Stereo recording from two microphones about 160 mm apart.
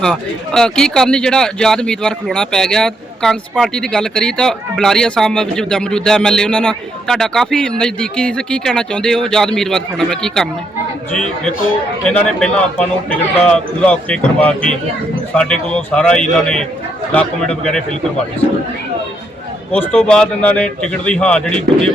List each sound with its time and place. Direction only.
0.0 s a man's voice: 5° left (ahead or behind)
12.0 s a man's voice: 5° left (ahead or behind)
19.7 s a man's voice: 10° left (ahead or behind)